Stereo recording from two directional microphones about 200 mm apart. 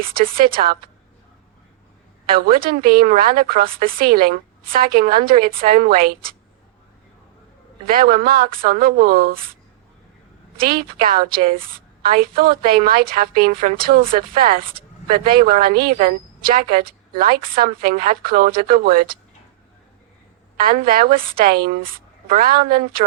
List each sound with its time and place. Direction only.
0.1 s a woman's voice: 45° right (ahead or behind)
2.2 s a woman's voice: 45° right (ahead or behind)
7.9 s a woman's voice: 45° right (ahead or behind)
10.6 s a woman's voice: 50° right (ahead or behind)
20.6 s a woman's voice: 45° right (ahead or behind)